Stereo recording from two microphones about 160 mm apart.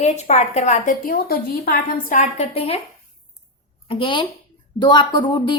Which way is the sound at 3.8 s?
30° left (ahead or behind).